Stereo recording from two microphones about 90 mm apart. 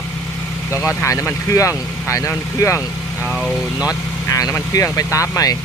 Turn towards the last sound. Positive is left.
turn(degrees=40)  # may be behind; listen again after turning